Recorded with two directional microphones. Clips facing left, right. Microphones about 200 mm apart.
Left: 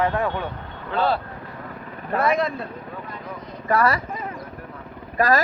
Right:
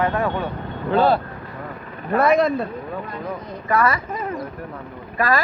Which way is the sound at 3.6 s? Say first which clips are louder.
Even; 35° left (ahead or behind).